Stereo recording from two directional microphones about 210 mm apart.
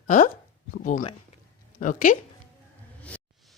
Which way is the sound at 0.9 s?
40° left (ahead or behind).